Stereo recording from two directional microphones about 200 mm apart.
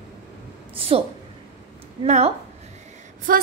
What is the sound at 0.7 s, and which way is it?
Speech, 30° right (ahead or behind).